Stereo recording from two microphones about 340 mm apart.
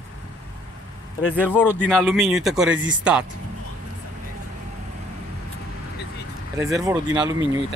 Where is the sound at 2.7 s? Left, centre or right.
Right.